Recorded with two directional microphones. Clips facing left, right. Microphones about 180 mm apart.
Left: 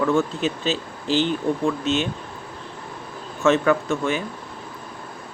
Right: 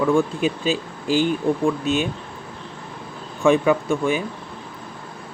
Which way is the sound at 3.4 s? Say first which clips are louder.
Right 2 dB; 15° right (ahead or behind).